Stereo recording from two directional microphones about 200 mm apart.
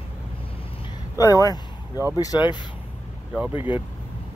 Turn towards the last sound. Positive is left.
turn(degrees=-10)  # may be behind; listen again after turning